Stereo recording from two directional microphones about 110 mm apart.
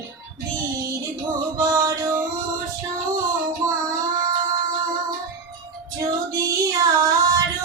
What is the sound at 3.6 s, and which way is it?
Child singing, 30° right (ahead or behind).